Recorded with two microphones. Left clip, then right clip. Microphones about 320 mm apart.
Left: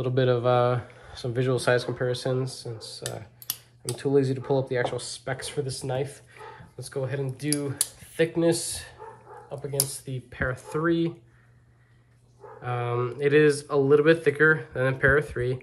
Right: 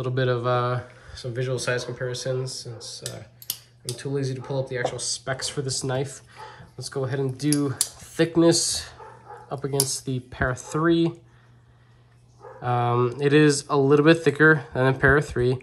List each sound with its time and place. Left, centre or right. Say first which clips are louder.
0.0 s speech: left 1 dB; centre
12.6 s speech: right 6 dB; centre